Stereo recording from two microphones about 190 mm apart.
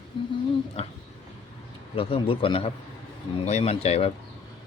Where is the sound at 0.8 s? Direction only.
30° left (ahead or behind).